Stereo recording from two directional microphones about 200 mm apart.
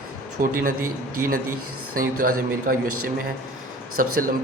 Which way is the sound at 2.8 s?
90° right.